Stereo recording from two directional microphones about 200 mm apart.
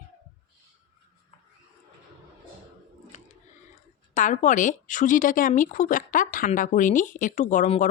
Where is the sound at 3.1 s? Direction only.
40° left (ahead or behind).